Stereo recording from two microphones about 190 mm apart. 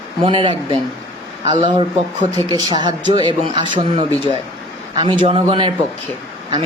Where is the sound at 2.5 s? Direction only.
20° right (ahead or behind).